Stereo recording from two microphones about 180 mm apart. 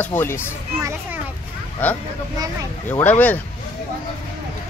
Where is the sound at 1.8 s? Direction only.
10° left (ahead or behind).